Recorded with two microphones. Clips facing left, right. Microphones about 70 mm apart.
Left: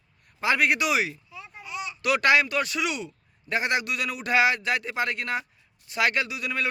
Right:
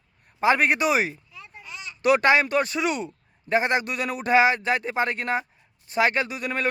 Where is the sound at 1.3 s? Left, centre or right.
Centre.